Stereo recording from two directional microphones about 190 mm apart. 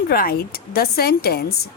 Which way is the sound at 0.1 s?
55° left (ahead or behind).